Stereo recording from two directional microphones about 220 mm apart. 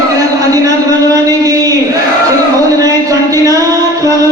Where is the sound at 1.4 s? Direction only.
15° right (ahead or behind).